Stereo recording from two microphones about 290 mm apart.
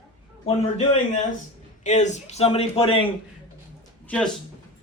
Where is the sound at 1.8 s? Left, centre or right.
Left.